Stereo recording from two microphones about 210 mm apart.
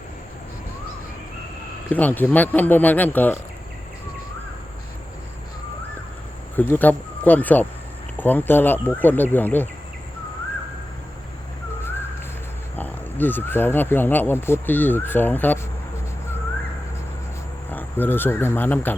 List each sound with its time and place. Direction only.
1.9 s speech: 10° left (ahead or behind)
6.6 s speech: 10° left (ahead or behind)
11.8 s a sound: 10° left (ahead or behind)
12.7 s speech: 10° left (ahead or behind)
17.7 s speech: 10° left (ahead or behind)